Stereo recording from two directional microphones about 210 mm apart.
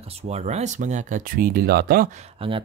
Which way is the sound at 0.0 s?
30° right (ahead or behind).